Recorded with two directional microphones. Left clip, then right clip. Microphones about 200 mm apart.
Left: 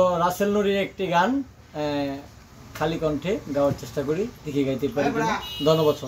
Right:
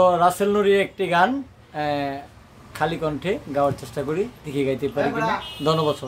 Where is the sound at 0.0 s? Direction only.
20° right (ahead or behind).